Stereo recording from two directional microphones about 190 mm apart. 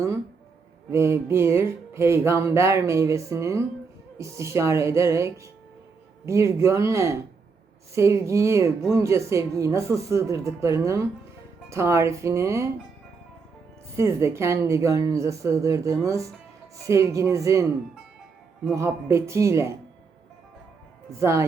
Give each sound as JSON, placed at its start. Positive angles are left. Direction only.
{"t": 0.9, "sound": "music", "side_deg": -15}
{"t": 13.9, "sound": "music", "side_deg": -15}
{"t": 21.2, "sound": "music", "side_deg": -15}